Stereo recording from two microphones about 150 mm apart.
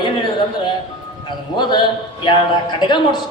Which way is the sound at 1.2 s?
30° left (ahead or behind).